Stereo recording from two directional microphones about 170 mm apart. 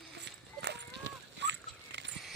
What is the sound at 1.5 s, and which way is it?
Dog, 90° right.